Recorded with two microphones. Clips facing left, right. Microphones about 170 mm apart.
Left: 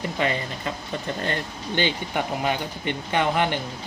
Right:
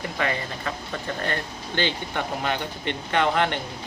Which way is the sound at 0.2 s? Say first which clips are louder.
Left 1 dB; 20° left (ahead or behind).